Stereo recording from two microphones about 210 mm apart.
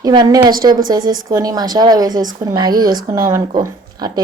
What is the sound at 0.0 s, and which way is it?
A woman's voice, 20° right (ahead or behind).